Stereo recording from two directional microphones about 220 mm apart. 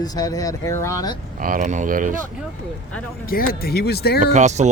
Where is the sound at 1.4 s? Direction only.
35° right (ahead or behind).